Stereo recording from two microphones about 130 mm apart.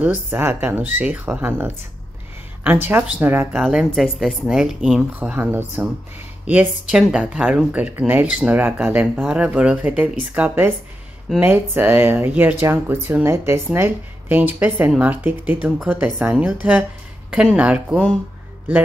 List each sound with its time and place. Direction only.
0.0 s speech: 15° right (ahead or behind)
2.9 s speech: 15° right (ahead or behind)
5.3 s speech: 15° right (ahead or behind)